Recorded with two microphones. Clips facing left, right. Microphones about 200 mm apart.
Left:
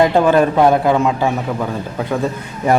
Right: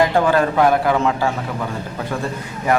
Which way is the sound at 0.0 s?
20° left (ahead or behind).